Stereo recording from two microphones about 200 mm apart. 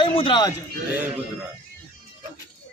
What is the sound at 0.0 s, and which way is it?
Speech, 25° left (ahead or behind).